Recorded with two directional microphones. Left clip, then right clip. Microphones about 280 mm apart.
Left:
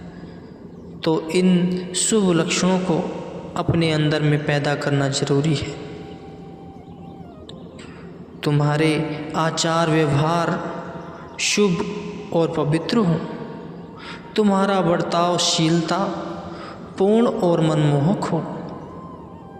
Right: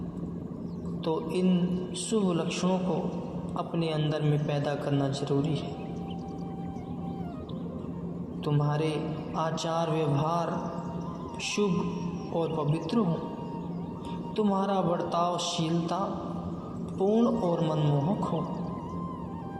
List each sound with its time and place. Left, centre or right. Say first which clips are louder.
1.0 s a man's voice: left 10 dB; left
8.4 s a man's voice: left 10 dB; left
14.3 s a man's voice: left 9 dB; left